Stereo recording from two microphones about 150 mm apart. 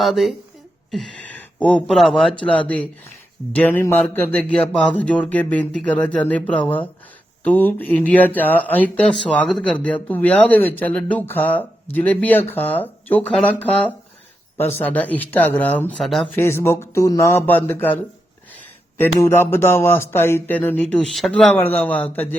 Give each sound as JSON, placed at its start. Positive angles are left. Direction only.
{"t": 0.0, "sound": "speech", "side_deg": 0}
{"t": 16.3, "sound": "speech", "side_deg": 15}